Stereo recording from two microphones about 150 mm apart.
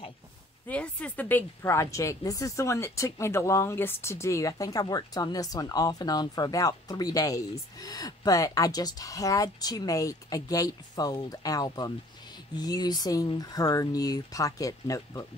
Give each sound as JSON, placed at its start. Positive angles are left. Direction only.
{"t": 0.7, "sound": "a woman's voice", "side_deg": 10}